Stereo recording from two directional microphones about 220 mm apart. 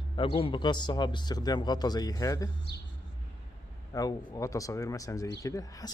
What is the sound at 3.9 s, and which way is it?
A man's voice, 15° left (ahead or behind).